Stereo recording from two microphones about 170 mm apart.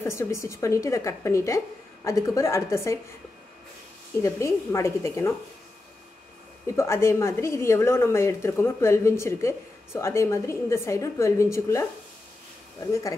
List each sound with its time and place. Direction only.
0.0 s a woman's voice: 15° left (ahead or behind)
4.2 s a woman's voice: 15° left (ahead or behind)
6.7 s a woman's voice: 15° left (ahead or behind)